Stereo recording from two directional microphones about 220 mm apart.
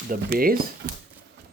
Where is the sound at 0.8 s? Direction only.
60° right (ahead or behind).